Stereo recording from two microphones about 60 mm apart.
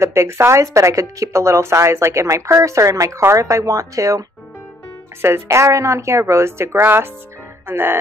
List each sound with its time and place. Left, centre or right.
0.0 s speech: right
5.2 s a woman's voice: right
6.8 s music: right